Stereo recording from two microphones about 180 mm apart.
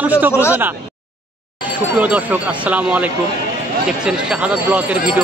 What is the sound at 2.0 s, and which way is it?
Jingle bell, 10° right (ahead or behind).